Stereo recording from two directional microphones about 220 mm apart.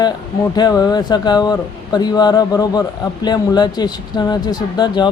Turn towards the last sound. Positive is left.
turn(degrees=20)  # may be behind; listen again after turning